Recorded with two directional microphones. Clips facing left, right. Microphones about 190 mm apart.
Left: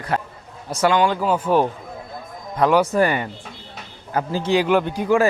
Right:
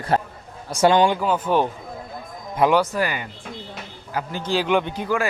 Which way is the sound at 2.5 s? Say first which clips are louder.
Left 1 dB; 5° right (ahead or behind).